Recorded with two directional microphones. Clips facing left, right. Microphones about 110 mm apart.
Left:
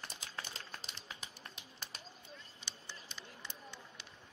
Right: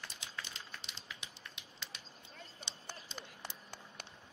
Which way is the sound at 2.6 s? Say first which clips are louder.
Right 2 dB; 50° right (ahead or behind).